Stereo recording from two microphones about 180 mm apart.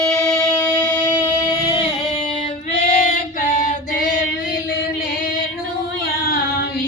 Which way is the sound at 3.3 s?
45° left (ahead or behind).